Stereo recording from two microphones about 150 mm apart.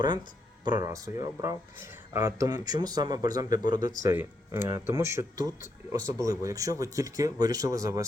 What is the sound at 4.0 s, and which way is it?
Speech, 15° right (ahead or behind).